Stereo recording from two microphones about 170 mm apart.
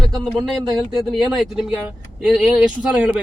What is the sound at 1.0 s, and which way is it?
Speech, centre (ahead or behind).